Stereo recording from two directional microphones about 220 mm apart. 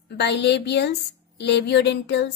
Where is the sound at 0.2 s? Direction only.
50° left (ahead or behind).